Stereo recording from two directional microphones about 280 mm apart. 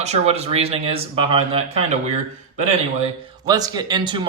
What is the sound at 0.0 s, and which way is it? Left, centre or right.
Speech, right.